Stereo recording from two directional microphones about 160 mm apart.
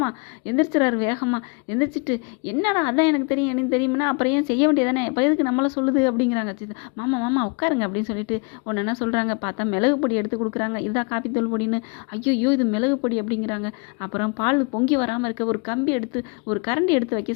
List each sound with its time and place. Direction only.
0.0 s speech: 20° left (ahead or behind)